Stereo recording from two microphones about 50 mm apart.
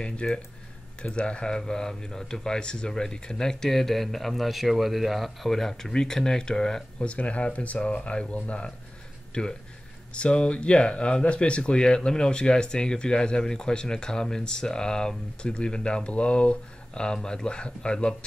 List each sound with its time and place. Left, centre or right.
0.0 s speech: left
7.1 s speech: left